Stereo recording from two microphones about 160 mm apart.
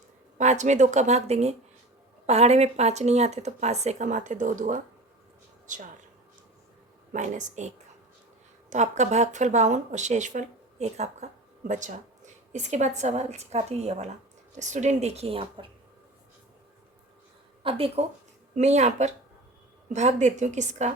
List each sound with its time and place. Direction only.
0.3 s speech: 50° right (ahead or behind)
7.1 s speech: 50° right (ahead or behind)
8.7 s speech: 45° right (ahead or behind)
17.6 s speech: 35° right (ahead or behind)